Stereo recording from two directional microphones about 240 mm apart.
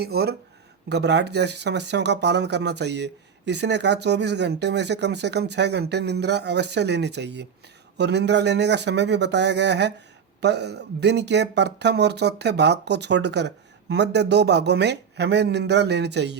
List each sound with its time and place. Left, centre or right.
0.0 s speech: right